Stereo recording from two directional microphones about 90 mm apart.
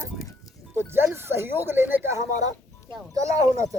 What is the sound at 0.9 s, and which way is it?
Speech, 25° right (ahead or behind).